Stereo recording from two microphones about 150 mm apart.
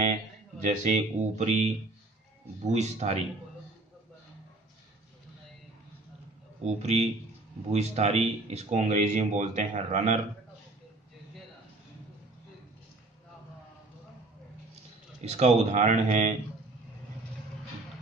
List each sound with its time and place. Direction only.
0.6 s speech: 55° right (ahead or behind)
6.6 s speech: 45° right (ahead or behind)
15.2 s speech: 45° right (ahead or behind)